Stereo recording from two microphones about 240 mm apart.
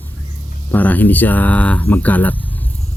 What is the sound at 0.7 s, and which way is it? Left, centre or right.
Speech, centre.